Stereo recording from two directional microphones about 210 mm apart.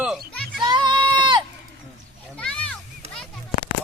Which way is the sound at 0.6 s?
20° right (ahead or behind).